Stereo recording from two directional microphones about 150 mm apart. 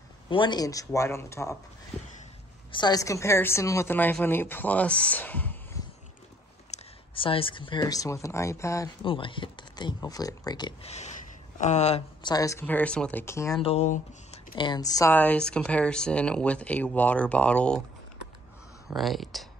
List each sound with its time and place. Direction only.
0.3 s speech: 30° left (ahead or behind)
2.7 s a woman's voice: 25° left (ahead or behind); by 5.8 s 10° left (ahead or behind)
6.7 s speech: 35° left (ahead or behind); by 8.9 s 20° left (ahead or behind)
9.0 s speech: 35° left (ahead or behind)
10.8 s speech: 45° left (ahead or behind)
12.2 s a woman's voice: 25° left (ahead or behind)
13.6 s speech: 45° left (ahead or behind)
14.5 s speech: 30° left (ahead or behind)
15.1 s a woman's voice: 10° left (ahead or behind)
18.9 s speech: centre (ahead or behind)